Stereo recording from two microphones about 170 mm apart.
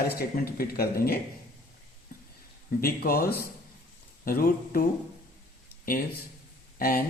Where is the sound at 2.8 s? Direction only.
60° left (ahead or behind).